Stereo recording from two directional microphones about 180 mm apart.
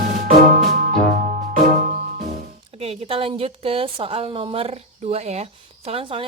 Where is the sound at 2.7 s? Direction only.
35° right (ahead or behind).